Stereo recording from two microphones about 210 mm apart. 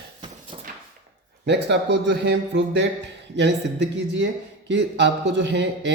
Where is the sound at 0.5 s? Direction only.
30° right (ahead or behind).